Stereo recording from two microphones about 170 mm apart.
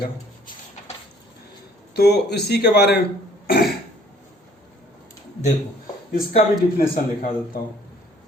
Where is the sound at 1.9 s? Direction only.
70° left (ahead or behind).